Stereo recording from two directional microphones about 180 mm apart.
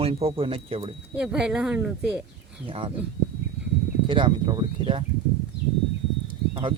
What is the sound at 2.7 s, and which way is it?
Speech, 30° right (ahead or behind).